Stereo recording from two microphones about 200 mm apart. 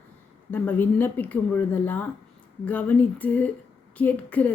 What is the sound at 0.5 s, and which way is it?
A woman's voice, 10° left (ahead or behind).